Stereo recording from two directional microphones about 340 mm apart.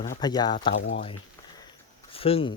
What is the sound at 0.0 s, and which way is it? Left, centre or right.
Speech, centre.